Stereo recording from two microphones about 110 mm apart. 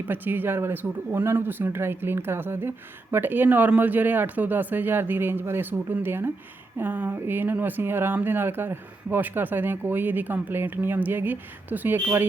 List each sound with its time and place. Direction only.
0.1 s speech: 20° right (ahead or behind)